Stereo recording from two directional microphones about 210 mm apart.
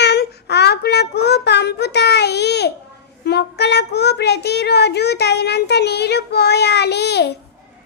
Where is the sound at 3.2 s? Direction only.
50° left (ahead or behind).